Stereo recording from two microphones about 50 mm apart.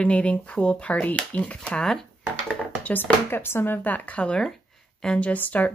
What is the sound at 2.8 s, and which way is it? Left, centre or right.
Speech, left.